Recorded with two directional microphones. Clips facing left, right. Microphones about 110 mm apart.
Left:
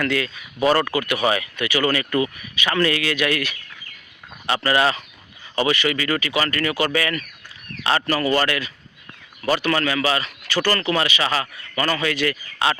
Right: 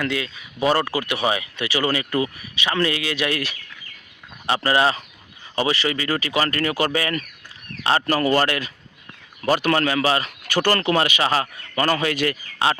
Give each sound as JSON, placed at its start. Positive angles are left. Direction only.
{"t": 0.0, "sound": "speech", "side_deg": -15}